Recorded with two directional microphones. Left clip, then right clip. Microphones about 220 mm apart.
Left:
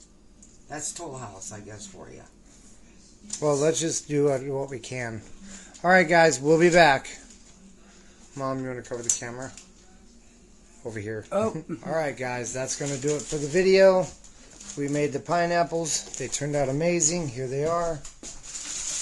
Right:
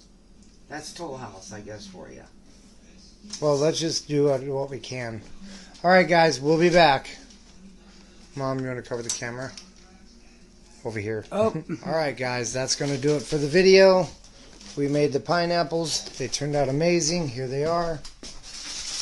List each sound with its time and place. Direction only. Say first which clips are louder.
1.0 s speech: right 3 dB; 5° left (ahead or behind)
3.3 s speech: right 1 dB; 5° left (ahead or behind)
8.4 s speech: right 2 dB; 5° right (ahead or behind)
10.8 s speech: right 4 dB; 10° right (ahead or behind)